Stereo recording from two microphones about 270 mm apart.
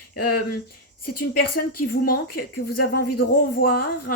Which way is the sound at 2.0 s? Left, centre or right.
Left.